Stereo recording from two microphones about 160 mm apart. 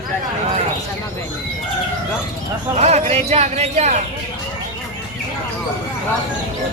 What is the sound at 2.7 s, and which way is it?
Speech, 45° right (ahead or behind).